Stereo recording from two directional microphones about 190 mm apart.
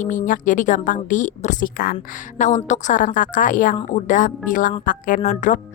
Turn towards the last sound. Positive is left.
turn(degrees=40)  # may be behind; listen again after turning